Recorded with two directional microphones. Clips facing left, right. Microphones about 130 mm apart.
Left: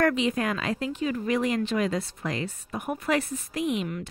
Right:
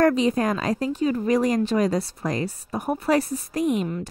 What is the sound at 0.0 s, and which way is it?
A woman's voice, 35° right (ahead or behind).